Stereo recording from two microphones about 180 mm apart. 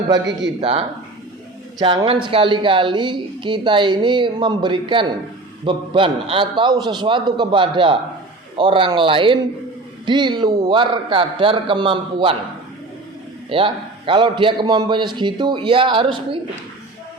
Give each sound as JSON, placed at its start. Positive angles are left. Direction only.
{"t": 0.6, "sound": "a woman's voice", "side_deg": -30}
{"t": 13.5, "sound": "a woman's voice", "side_deg": -30}